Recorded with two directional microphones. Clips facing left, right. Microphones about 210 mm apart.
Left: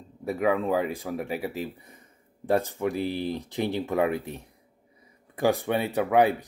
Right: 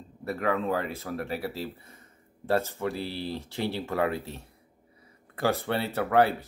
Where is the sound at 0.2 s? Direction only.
15° left (ahead or behind).